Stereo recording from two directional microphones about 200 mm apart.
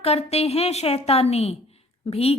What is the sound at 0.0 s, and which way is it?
A woman's voice, 30° left (ahead or behind).